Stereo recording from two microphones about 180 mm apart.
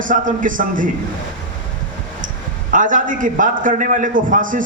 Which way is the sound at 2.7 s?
45° right (ahead or behind).